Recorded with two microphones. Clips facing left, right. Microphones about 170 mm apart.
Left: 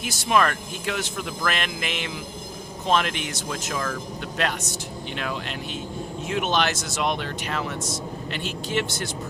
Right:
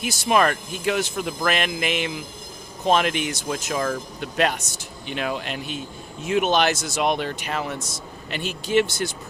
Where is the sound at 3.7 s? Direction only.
25° right (ahead or behind).